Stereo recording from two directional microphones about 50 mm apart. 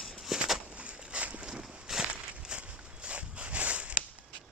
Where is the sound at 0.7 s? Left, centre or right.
Right.